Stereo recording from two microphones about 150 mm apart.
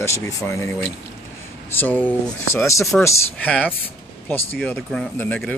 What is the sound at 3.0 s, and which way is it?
Speech, 10° left (ahead or behind).